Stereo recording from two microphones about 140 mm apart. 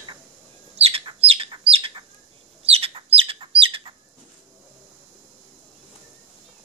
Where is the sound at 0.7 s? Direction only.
45° right (ahead or behind).